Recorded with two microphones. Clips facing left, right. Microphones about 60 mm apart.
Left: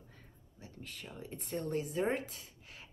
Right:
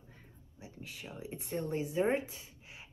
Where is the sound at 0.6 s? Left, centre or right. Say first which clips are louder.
Right 1 dB; centre.